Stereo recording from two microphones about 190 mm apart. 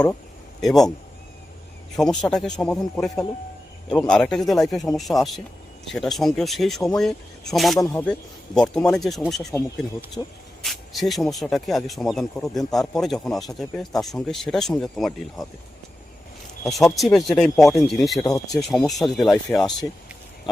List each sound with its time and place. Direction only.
0.6 s speech: centre (ahead or behind)
2.0 s speech: 20° left (ahead or behind)
2.3 s speech: 5° left (ahead or behind)
16.6 s speech: centre (ahead or behind)
18.2 s speech: 15° left (ahead or behind)
18.6 s speech: centre (ahead or behind)